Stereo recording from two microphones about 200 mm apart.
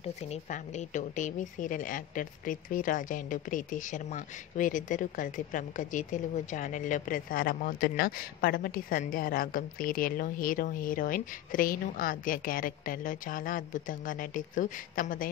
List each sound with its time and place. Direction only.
0.0 s speech: 35° left (ahead or behind)